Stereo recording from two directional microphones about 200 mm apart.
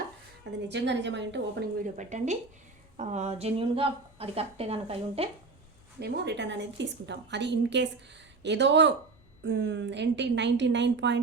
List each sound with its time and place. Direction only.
0.7 s a woman's voice: 60° right (ahead or behind)
2.0 s a woman's voice: 35° right (ahead or behind)
6.0 s a woman's voice: 55° right (ahead or behind)